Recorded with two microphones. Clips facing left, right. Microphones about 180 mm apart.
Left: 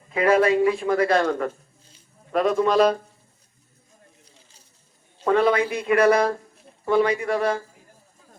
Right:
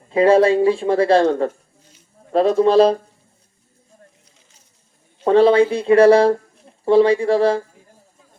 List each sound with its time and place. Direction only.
0.1 s a man's voice: 30° right (ahead or behind)
5.2 s a man's voice: 30° right (ahead or behind)